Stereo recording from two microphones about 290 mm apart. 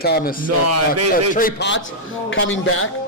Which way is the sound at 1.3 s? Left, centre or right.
Left.